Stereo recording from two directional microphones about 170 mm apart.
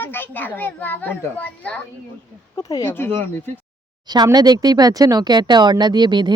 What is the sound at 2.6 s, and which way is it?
Speech, 20° left (ahead or behind).